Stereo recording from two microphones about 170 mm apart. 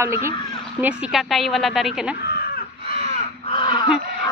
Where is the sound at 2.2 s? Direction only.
65° left (ahead or behind).